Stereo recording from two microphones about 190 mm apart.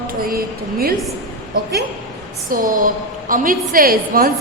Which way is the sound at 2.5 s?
45° right (ahead or behind).